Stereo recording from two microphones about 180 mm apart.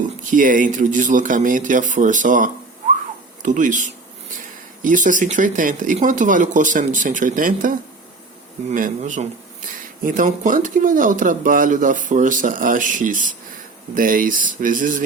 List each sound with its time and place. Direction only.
0.3 s speech: 50° right (ahead or behind)